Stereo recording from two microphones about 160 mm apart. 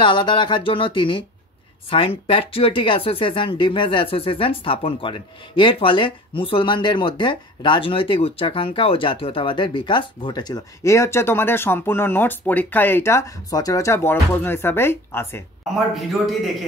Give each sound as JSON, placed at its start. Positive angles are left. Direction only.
{"t": 0.0, "sound": "speech", "side_deg": 30}
{"t": 15.9, "sound": "a man's voice", "side_deg": 0}